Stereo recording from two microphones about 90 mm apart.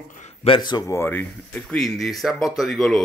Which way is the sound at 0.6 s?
55° left (ahead or behind).